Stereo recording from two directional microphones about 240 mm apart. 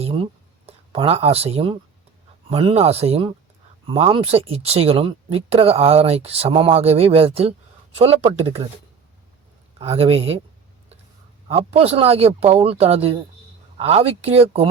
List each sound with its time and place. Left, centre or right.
0.0 s a sound: right
2.5 s speech: right
9.7 s speech: right
11.4 s speech: right